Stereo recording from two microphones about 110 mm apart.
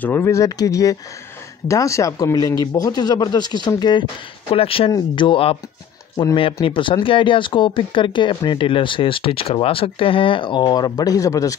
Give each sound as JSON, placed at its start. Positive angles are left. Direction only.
{"t": 0.0, "sound": "speech", "side_deg": 20}
{"t": 4.5, "sound": "speech", "side_deg": 55}